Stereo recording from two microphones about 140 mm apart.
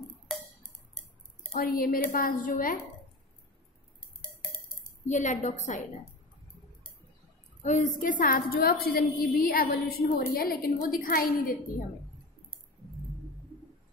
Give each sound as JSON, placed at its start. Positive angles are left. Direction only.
{"t": 0.3, "sound": "cowbell", "side_deg": 5}
{"t": 1.5, "sound": "a woman's voice", "side_deg": 90}
{"t": 5.0, "sound": "a woman's voice", "side_deg": 60}
{"t": 7.6, "sound": "a woman's voice", "side_deg": 65}